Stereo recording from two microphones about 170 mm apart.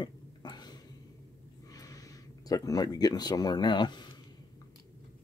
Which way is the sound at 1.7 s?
20° left (ahead or behind).